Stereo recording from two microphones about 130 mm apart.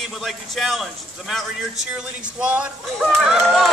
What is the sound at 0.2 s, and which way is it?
Speech, centre (ahead or behind).